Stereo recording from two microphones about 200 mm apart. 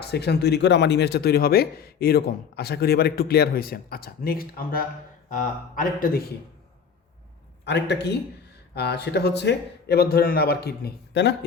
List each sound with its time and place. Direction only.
0.0 s speech: 55° left (ahead or behind)
7.6 s speech: 60° left (ahead or behind)